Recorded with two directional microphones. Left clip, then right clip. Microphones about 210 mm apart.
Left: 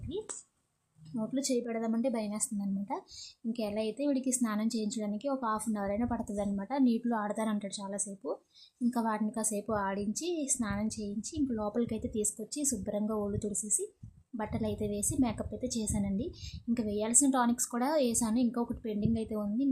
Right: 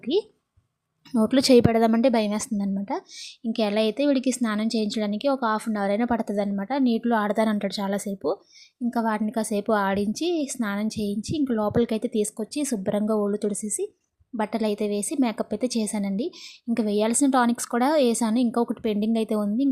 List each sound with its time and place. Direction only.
0.1 s a woman's voice: 30° right (ahead or behind)